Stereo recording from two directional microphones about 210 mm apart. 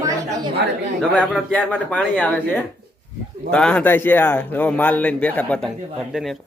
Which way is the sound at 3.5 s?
5° left (ahead or behind).